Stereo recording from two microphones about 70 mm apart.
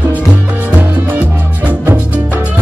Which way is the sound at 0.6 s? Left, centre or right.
Right.